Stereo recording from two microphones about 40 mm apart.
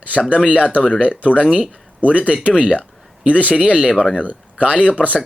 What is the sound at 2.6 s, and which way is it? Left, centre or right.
Speech, left.